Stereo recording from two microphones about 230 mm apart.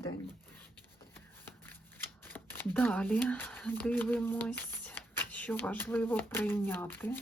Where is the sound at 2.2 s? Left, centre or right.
Centre.